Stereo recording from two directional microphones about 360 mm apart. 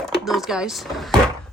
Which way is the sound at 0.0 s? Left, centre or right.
Centre.